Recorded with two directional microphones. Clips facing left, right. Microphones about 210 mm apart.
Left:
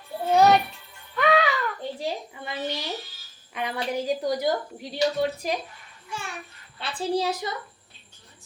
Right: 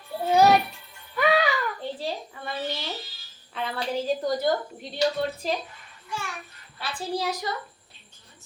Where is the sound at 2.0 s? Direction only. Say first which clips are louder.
Left 1 dB; 15° left (ahead or behind).